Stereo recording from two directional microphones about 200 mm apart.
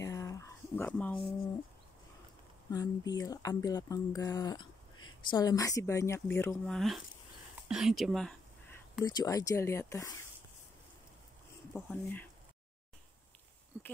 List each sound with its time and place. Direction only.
0.0 s a sound: 15° left (ahead or behind)
2.7 s speech: 20° left (ahead or behind)
7.6 s a sound: 5° right (ahead or behind)
9.0 s speech: 20° left (ahead or behind)
11.9 s speech: 10° left (ahead or behind)
13.7 s speech: 10° left (ahead or behind)